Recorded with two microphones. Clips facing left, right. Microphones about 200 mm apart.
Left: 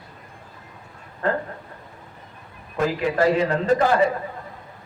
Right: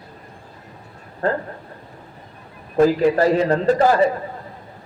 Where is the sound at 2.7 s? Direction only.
35° right (ahead or behind).